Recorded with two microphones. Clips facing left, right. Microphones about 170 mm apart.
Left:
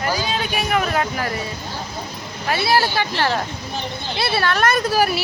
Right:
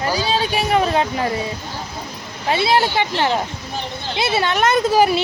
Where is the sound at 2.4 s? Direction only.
20° right (ahead or behind).